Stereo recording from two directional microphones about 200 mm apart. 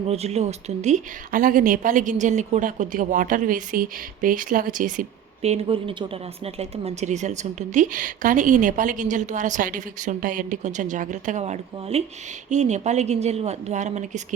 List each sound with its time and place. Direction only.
0.1 s a woman's voice: 30° right (ahead or behind)